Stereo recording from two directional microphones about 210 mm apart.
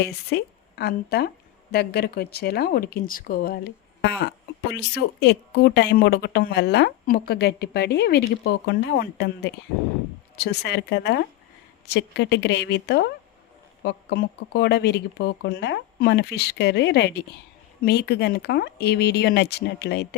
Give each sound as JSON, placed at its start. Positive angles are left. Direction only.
{"t": 0.0, "sound": "a woman's voice", "side_deg": 50}